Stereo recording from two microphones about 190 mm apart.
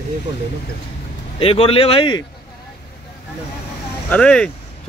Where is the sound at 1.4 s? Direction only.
30° left (ahead or behind).